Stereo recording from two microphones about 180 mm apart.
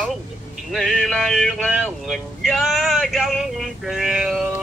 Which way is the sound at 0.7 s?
Centre (ahead or behind).